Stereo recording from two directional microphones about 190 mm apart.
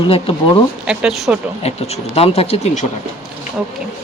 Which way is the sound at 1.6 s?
35° left (ahead or behind).